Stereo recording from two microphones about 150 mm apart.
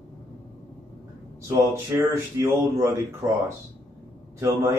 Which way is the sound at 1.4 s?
15° right (ahead or behind).